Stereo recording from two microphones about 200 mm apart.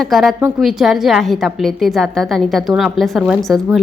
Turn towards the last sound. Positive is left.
turn(degrees=0)  # may be behind; listen again after turning